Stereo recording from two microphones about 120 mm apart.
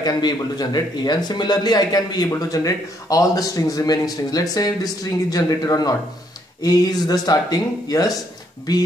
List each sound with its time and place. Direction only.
0.0 s speech: 35° left (ahead or behind)